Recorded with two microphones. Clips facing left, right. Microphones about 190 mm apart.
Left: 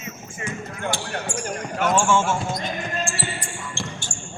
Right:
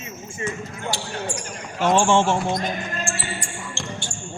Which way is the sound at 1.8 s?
25° right (ahead or behind).